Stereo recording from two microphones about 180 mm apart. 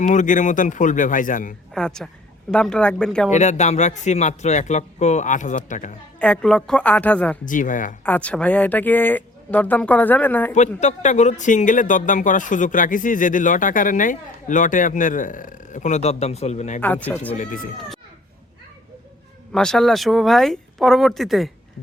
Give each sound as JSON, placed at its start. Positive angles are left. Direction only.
{"t": 0.0, "sound": "speech", "side_deg": 45}
{"t": 1.7, "sound": "speech", "side_deg": 5}
{"t": 3.2, "sound": "speech", "side_deg": 40}
{"t": 6.1, "sound": "speech", "side_deg": 5}
{"t": 7.4, "sound": "speech", "side_deg": 45}
{"t": 8.0, "sound": "speech", "side_deg": 10}
{"t": 10.8, "sound": "speech", "side_deg": 40}
{"t": 16.8, "sound": "speech", "side_deg": 10}
{"t": 17.3, "sound": "speech", "side_deg": 45}
{"t": 19.5, "sound": "speech", "side_deg": 5}